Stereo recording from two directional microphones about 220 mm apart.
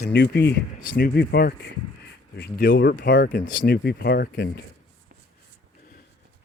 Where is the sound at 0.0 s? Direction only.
50° left (ahead or behind).